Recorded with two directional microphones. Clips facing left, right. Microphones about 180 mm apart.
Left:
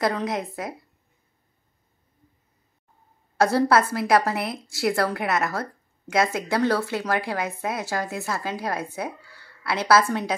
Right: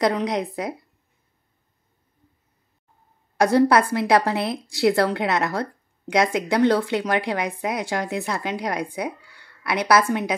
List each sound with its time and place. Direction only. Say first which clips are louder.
0.0 s a woman's voice: right 3 dB; 20° right (ahead or behind)
3.5 s a woman's voice: right 5 dB; 15° right (ahead or behind)